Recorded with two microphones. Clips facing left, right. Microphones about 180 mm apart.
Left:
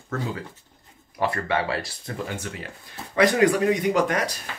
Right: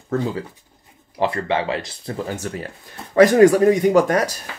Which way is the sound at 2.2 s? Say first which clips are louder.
Right 6 dB; 40° right (ahead or behind).